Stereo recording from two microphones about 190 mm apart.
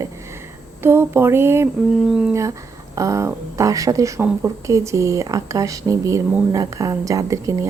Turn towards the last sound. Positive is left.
turn(degrees=-15)  # may be behind; listen again after turning